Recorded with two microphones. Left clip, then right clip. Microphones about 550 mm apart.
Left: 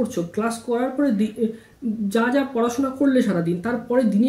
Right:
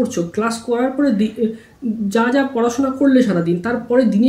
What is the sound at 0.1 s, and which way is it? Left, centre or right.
A woman's voice, left.